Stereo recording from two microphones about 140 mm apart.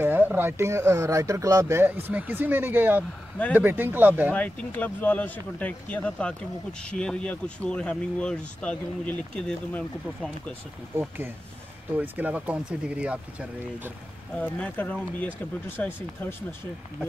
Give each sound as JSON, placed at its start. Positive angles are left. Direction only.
{"t": 0.0, "sound": "speech", "side_deg": -15}
{"t": 4.3, "sound": "speech", "side_deg": 10}
{"t": 11.0, "sound": "speech", "side_deg": -15}
{"t": 14.3, "sound": "speech", "side_deg": 10}